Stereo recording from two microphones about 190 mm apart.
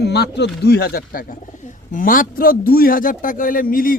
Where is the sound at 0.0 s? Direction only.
60° left (ahead or behind).